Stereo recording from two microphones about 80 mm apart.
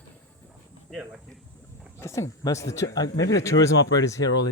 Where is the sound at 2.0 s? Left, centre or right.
Left.